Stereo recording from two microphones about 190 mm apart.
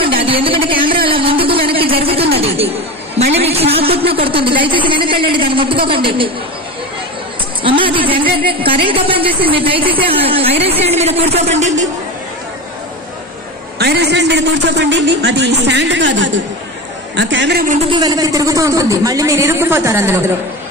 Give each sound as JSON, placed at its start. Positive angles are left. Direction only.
{"t": 0.0, "sound": "speech", "side_deg": -30}
{"t": 1.0, "sound": "a sound", "side_deg": -30}
{"t": 3.2, "sound": "a woman's voice", "side_deg": -35}
{"t": 7.6, "sound": "speech", "side_deg": -25}
{"t": 13.7, "sound": "a man's voice", "side_deg": -60}
{"t": 17.8, "sound": "speech", "side_deg": -20}